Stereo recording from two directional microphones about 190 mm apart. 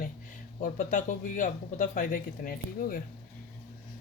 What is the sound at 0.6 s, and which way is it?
Speech, 40° left (ahead or behind).